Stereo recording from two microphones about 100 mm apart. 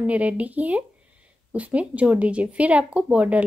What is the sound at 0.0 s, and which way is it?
Speech, 15° right (ahead or behind).